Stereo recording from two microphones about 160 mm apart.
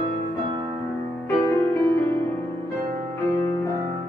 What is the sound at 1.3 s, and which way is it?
Music, 15° left (ahead or behind).